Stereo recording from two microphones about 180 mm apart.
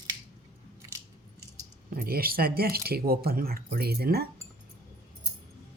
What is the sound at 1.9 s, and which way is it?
Speech, 55° right (ahead or behind).